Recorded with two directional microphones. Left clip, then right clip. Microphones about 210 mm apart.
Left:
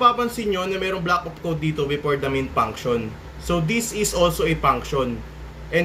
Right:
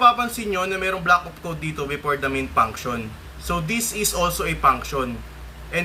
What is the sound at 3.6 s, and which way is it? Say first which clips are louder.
Speech: left 1 dB; 5° right (ahead or behind).